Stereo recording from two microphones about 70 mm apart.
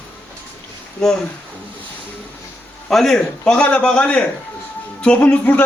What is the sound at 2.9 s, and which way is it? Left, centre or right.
A man's voice, centre.